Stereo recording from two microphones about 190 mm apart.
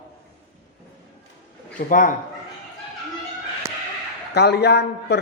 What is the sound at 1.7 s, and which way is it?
Speech, 45° left (ahead or behind).